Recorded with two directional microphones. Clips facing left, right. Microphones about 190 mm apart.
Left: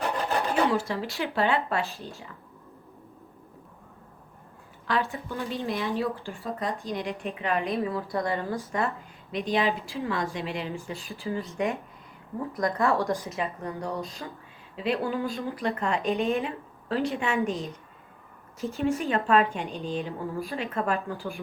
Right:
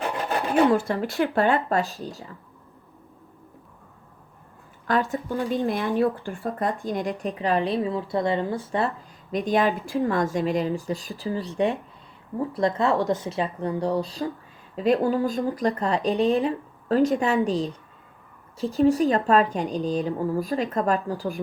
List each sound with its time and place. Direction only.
0.7 s speech: 50° right (ahead or behind)
4.9 s speech: 45° right (ahead or behind)
9.4 s speech: 50° right (ahead or behind)